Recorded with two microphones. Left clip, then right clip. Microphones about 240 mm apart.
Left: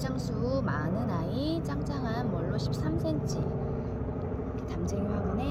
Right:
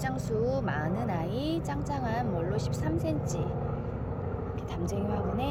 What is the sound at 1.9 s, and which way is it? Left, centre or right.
Speech, right.